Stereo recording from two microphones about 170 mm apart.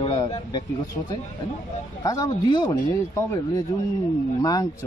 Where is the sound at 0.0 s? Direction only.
35° left (ahead or behind).